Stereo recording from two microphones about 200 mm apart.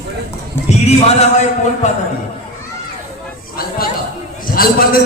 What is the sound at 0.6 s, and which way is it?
Music, 30° left (ahead or behind).